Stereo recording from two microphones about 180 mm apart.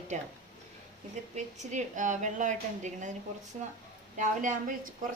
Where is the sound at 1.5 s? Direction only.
40° right (ahead or behind).